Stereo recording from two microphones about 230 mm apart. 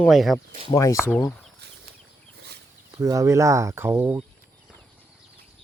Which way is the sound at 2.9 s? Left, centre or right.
Centre.